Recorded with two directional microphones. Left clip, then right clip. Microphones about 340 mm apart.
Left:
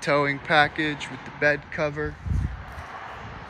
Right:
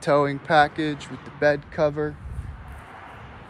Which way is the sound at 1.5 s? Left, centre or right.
Centre.